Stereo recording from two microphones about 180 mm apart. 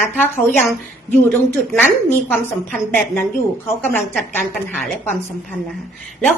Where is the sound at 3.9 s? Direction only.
5° left (ahead or behind).